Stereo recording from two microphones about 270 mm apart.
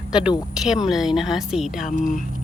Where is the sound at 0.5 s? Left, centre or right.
Centre.